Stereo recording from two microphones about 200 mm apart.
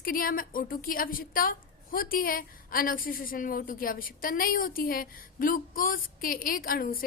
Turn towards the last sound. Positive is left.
turn(degrees=45)  # may be behind; listen again after turning